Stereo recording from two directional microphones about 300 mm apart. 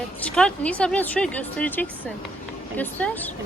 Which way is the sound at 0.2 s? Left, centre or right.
Centre.